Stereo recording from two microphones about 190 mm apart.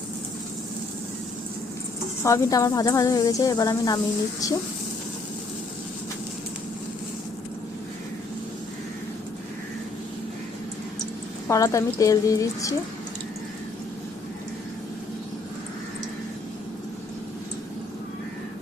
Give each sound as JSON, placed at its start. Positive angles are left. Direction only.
{"t": 2.2, "sound": "speech", "side_deg": 15}
{"t": 11.4, "sound": "a woman's voice", "side_deg": 15}